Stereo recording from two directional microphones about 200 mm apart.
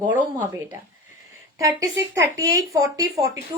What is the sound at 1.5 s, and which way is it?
Speech, 15° right (ahead or behind).